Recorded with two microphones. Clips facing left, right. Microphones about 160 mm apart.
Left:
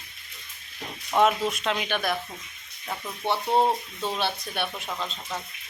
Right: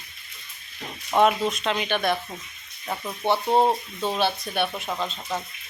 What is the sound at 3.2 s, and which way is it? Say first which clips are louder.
Speech: right 3 dB; 30° right (ahead or behind).